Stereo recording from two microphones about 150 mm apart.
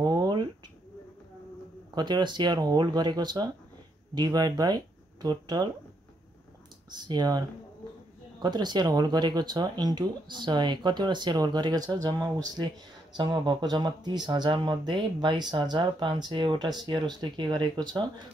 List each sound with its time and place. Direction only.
0.0 s a sound: 25° right (ahead or behind)
2.0 s speech: 30° right (ahead or behind)
6.9 s speech: 30° right (ahead or behind)